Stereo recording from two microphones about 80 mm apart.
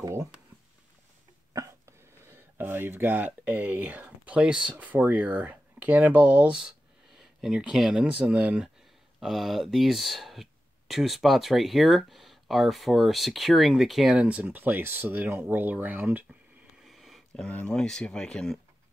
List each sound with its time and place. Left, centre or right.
1.5 s a sound: right
1.9 s speech: right
9.2 s speech: centre
14.1 s speech: centre
16.8 s a sound: centre
17.5 s speech: centre